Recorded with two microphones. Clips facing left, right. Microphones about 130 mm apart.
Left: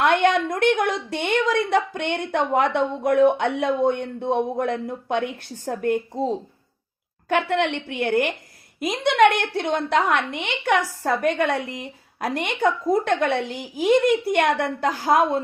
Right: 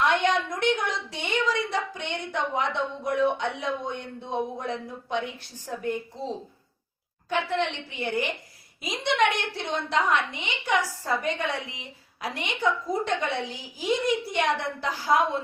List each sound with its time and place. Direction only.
0.0 s a woman's voice: 55° left (ahead or behind)
7.3 s a woman's voice: 60° left (ahead or behind)